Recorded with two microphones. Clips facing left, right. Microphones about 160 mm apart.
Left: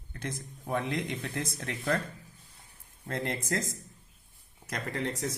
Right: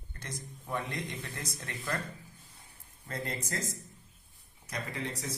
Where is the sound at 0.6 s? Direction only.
70° left (ahead or behind).